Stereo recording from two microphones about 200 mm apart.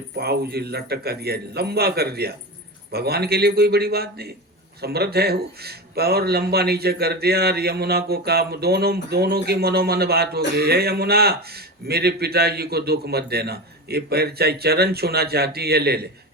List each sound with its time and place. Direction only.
0.2 s speech: 50° right (ahead or behind)